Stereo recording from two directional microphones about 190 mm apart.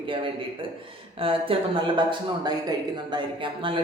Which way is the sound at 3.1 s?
25° right (ahead or behind).